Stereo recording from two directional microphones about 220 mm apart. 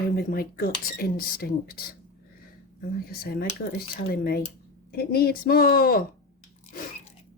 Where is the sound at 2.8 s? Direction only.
45° left (ahead or behind).